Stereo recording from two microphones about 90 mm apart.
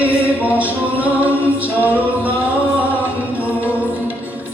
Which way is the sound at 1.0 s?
15° right (ahead or behind).